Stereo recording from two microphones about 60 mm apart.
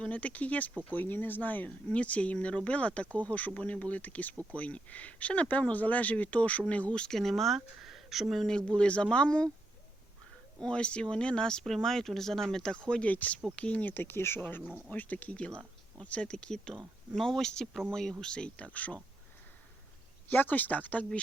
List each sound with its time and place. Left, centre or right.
0.0 s speech: left
10.6 s speech: centre
12.9 s speech: left
14.8 s speech: left
20.3 s speech: left